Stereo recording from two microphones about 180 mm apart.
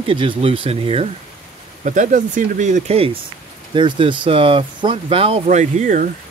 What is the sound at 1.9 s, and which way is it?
Speech, 45° right (ahead or behind).